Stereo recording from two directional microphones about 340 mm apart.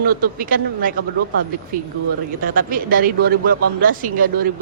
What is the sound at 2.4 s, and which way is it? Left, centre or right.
Speech, right.